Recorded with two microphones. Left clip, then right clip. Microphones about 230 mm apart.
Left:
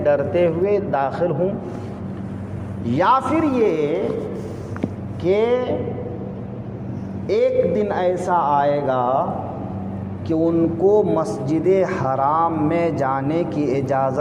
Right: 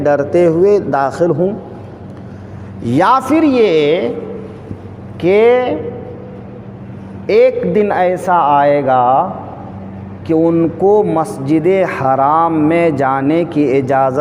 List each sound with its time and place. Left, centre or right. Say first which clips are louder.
0.0 s a man's voice: right 6 dB; right
2.8 s a man's voice: right 6 dB; right
5.2 s a man's voice: right 9 dB; right
7.3 s a man's voice: right 7 dB; right
10.2 s a man's voice: right 6 dB; right